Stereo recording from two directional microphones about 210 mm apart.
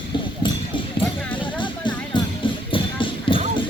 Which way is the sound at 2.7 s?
25° left (ahead or behind).